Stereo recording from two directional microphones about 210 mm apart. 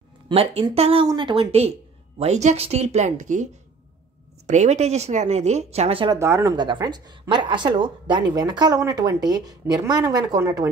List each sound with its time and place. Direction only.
0.3 s speech: 25° right (ahead or behind)
4.5 s speech: 35° right (ahead or behind)
6.1 s speech: 15° right (ahead or behind)